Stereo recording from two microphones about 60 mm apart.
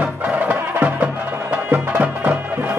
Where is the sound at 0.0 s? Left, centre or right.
Right.